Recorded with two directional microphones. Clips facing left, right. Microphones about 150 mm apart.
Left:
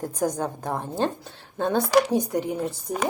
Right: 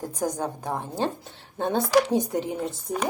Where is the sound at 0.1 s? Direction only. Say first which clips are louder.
Left 1 dB; 15° right (ahead or behind).